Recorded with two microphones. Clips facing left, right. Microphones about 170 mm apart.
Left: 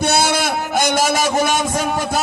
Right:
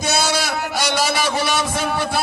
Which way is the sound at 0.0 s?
60° left (ahead or behind).